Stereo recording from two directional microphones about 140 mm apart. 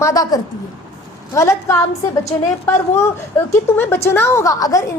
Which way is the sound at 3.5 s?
20° left (ahead or behind).